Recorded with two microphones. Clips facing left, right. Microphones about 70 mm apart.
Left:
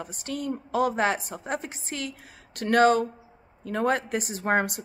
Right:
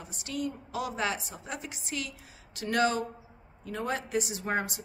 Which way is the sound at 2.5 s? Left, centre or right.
Left.